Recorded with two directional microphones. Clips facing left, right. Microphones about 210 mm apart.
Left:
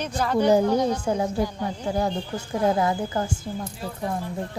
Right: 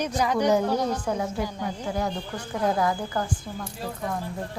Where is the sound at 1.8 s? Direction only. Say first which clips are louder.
Left 4 dB; 30° left (ahead or behind).